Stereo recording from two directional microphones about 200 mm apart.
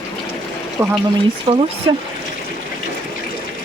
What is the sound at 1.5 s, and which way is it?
Speech, 25° right (ahead or behind).